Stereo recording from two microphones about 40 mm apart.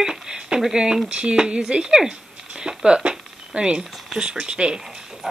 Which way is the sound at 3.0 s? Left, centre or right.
Right.